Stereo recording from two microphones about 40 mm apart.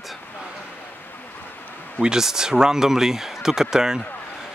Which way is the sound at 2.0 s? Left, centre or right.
Centre.